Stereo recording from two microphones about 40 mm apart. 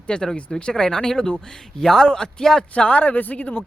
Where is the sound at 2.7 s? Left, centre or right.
Left.